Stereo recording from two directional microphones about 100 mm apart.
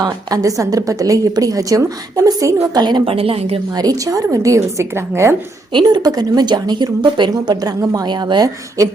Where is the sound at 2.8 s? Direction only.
45° right (ahead or behind).